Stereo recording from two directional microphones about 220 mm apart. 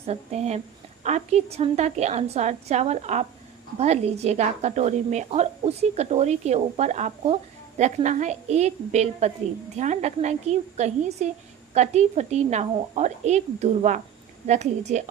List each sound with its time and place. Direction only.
0.0 s a woman's voice: 30° right (ahead or behind)